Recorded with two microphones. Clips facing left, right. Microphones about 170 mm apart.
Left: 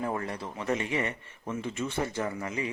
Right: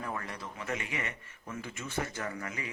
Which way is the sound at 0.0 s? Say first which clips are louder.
Left 6 dB; 30° left (ahead or behind).